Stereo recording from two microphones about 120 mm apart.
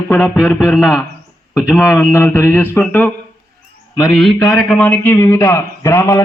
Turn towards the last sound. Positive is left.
turn(degrees=25)  # may be behind; listen again after turning